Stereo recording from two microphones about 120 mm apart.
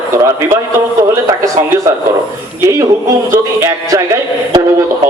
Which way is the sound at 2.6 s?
25° right (ahead or behind).